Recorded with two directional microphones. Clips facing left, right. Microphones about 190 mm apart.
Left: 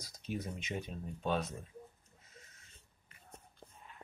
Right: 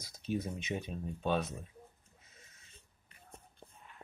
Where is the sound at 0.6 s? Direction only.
20° right (ahead or behind).